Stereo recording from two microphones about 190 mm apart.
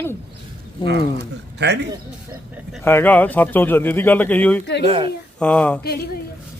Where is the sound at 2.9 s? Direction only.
10° left (ahead or behind).